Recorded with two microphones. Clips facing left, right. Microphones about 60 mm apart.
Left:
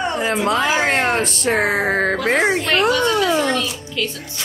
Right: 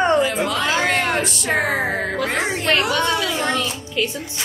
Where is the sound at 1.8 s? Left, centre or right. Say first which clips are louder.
Left 4 dB; left.